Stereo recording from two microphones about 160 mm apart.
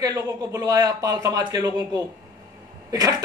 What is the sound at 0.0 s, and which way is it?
Speech, 20° right (ahead or behind).